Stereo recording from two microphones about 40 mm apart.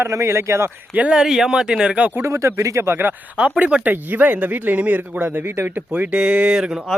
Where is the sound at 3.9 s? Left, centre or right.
Right.